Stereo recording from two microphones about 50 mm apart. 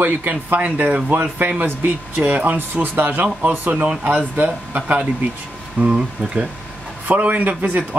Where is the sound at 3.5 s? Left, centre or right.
Right.